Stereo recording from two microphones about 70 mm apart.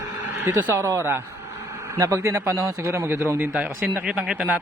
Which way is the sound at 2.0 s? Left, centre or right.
Right.